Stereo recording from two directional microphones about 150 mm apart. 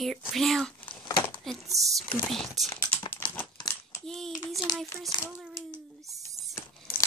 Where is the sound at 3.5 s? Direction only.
25° left (ahead or behind).